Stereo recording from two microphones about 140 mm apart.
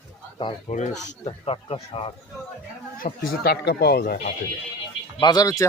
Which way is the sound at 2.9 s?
90° left.